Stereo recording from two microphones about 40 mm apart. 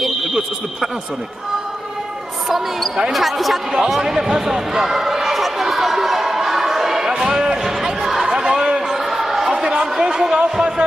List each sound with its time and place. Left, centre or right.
0.0 s fire alarm: centre
2.4 s speech: centre
3.9 s a sound: centre